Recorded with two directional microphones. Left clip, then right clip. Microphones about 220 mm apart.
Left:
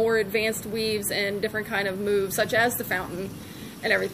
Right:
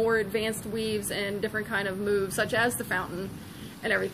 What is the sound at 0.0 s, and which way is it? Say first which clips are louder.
A woman's voice: left 3 dB; 5° left (ahead or behind).